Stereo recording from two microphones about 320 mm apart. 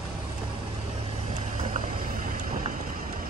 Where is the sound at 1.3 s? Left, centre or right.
Right.